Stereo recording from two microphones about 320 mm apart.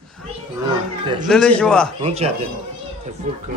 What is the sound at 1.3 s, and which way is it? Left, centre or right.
Speech, centre.